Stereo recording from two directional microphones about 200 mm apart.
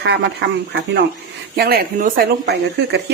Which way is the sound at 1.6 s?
50° right (ahead or behind).